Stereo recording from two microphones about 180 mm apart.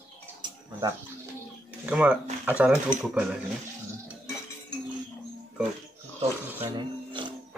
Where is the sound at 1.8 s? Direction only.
5° right (ahead or behind).